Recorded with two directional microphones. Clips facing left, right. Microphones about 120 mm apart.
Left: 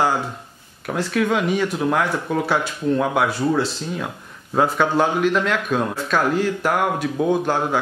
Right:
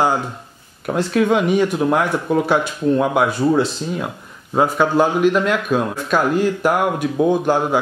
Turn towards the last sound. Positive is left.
turn(degrees=-15)  # may be behind; listen again after turning